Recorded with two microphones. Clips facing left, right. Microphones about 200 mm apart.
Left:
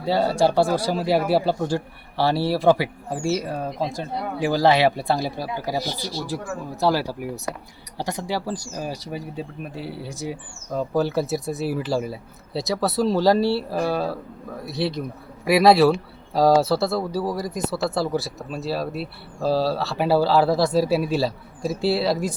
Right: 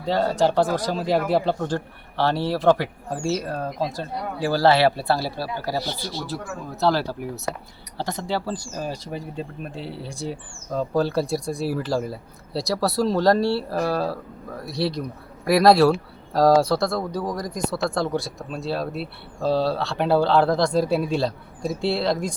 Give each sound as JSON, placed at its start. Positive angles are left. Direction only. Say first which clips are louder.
{"t": 0.0, "sound": "speech", "louder": "left 1 dB", "side_deg": 10}